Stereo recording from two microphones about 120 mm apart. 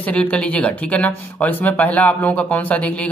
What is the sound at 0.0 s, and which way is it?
Speech, 10° left (ahead or behind).